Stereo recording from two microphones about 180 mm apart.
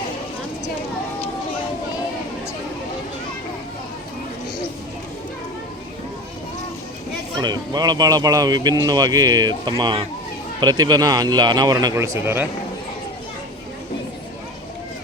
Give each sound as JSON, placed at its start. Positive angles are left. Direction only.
{"t": 7.3, "sound": "speech", "side_deg": -25}